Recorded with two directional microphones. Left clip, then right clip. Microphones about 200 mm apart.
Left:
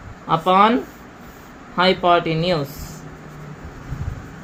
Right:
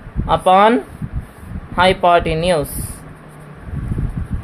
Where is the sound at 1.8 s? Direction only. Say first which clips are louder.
Right 4 dB; 60° right (ahead or behind).